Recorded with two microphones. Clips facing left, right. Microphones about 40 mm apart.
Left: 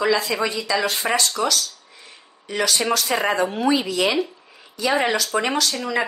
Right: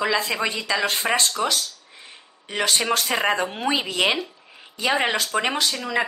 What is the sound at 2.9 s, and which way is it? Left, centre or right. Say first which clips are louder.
Speech: left 1 dB; right.